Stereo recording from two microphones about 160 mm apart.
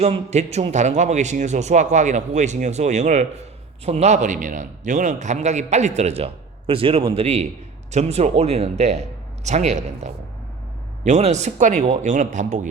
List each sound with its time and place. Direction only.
0.0 s a man's voice: 45° right (ahead or behind)